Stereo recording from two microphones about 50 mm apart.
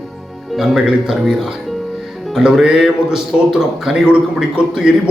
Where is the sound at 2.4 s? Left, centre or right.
Centre.